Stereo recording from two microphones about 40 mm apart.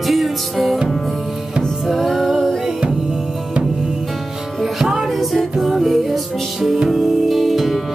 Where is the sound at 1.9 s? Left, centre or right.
Centre.